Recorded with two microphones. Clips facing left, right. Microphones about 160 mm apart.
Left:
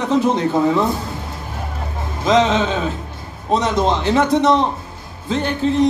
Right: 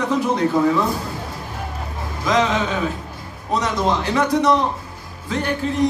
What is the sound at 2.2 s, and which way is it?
Music, 25° left (ahead or behind).